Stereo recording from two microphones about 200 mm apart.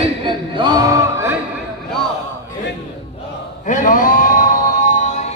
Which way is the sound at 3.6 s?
40° left (ahead or behind).